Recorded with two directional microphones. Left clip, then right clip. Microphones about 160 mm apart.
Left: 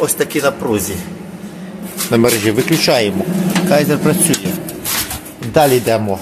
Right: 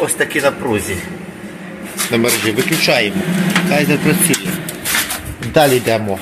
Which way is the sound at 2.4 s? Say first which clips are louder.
Left 1 dB; 40° left (ahead or behind).